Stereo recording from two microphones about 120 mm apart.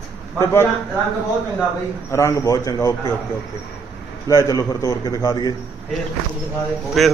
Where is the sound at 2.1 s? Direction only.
25° left (ahead or behind).